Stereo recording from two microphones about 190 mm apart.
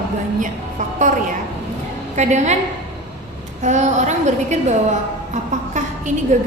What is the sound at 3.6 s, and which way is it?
A woman's voice, 40° right (ahead or behind).